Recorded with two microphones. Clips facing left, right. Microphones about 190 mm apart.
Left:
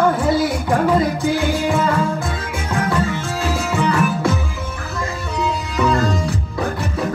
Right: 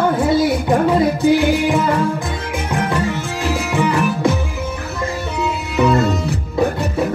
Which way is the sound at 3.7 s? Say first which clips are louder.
Right 1 dB; 15° right (ahead or behind).